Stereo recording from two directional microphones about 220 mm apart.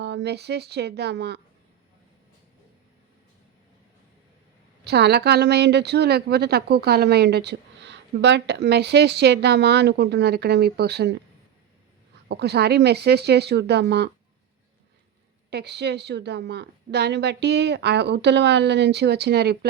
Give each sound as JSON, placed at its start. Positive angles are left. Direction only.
{"t": 0.0, "sound": "a woman's voice", "side_deg": -50}
{"t": 4.8, "sound": "a woman's voice", "side_deg": -50}
{"t": 12.3, "sound": "a woman's voice", "side_deg": -50}
{"t": 15.4, "sound": "a woman's voice", "side_deg": -50}